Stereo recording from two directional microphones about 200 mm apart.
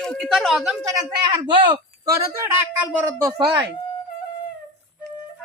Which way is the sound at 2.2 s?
10° right (ahead or behind).